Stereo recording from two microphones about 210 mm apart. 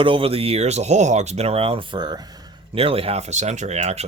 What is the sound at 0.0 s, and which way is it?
Speech, 25° right (ahead or behind).